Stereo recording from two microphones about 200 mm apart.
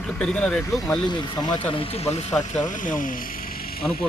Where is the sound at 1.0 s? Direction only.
20° left (ahead or behind); by 3.1 s 40° left (ahead or behind).